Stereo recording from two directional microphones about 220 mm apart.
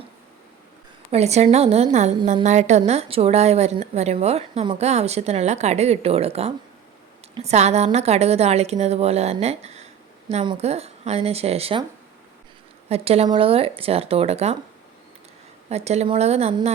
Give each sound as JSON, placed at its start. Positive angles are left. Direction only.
{"t": 1.1, "sound": "a woman's voice", "side_deg": -30}
{"t": 12.9, "sound": "a woman's voice", "side_deg": -25}
{"t": 15.7, "sound": "a woman's voice", "side_deg": -30}